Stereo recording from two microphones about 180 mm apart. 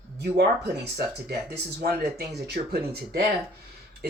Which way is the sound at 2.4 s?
60° right (ahead or behind).